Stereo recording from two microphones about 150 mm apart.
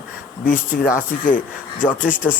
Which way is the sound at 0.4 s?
65° left (ahead or behind).